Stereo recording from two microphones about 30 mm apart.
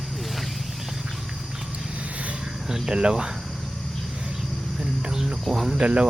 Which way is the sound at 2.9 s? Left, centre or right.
Right.